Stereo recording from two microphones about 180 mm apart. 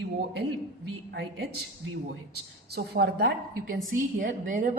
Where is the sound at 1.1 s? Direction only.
70° right (ahead or behind).